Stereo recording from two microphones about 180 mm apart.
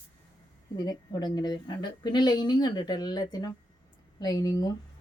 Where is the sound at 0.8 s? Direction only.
20° left (ahead or behind).